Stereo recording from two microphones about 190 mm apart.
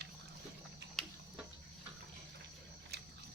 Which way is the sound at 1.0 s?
Centre (ahead or behind).